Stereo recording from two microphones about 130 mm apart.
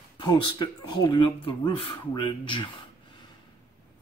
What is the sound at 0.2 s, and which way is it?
Speech, 35° left (ahead or behind).